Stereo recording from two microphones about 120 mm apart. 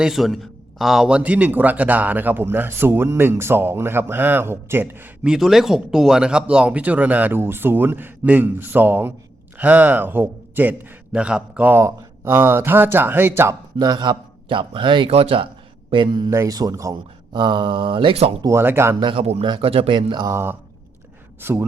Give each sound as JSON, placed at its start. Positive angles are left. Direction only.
{"t": 0.0, "sound": "a man's voice", "side_deg": 0}
{"t": 13.7, "sound": "a man's voice", "side_deg": -35}
{"t": 15.9, "sound": "speech", "side_deg": -40}
{"t": 16.3, "sound": "speech", "side_deg": -30}
{"t": 17.3, "sound": "a man's voice", "side_deg": -40}
{"t": 18.4, "sound": "speech", "side_deg": -20}
{"t": 18.9, "sound": "speech", "side_deg": -40}
{"t": 19.2, "sound": "speech", "side_deg": -60}
{"t": 19.5, "sound": "speech", "side_deg": -50}
{"t": 20.3, "sound": "a man's voice", "side_deg": -20}